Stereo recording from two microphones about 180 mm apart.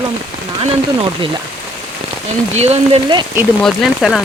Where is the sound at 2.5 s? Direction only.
35° right (ahead or behind).